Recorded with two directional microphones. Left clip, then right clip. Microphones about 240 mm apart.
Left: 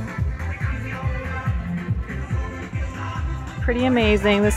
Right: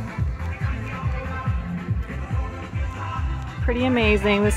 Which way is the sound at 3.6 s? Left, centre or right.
Centre.